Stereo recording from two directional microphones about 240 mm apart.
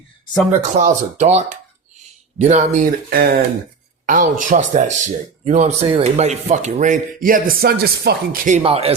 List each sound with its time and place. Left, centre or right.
0.6 s speech: right